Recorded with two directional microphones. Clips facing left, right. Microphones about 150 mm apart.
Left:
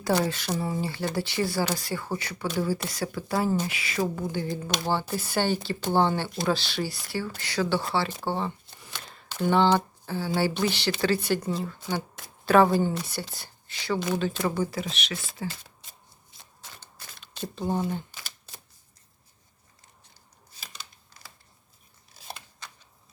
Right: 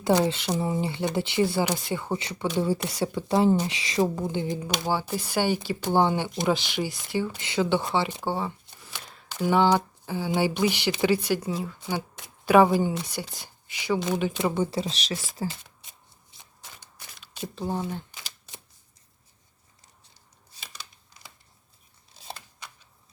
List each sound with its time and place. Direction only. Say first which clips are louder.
0.0 s speech: right 3 dB; 20° right (ahead or behind)
16.4 s shuffling cards: left 1 dB; 15° right (ahead or behind)
17.4 s speech: left 2 dB; centre (ahead or behind)